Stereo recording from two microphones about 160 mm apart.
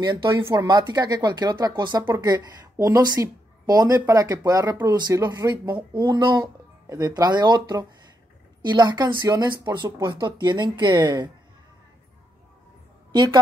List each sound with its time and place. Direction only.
0.0 s speech: 30° right (ahead or behind)
13.1 s a woman's voice: 30° right (ahead or behind)